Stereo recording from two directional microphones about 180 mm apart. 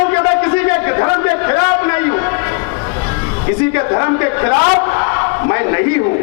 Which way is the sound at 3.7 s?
25° left (ahead or behind).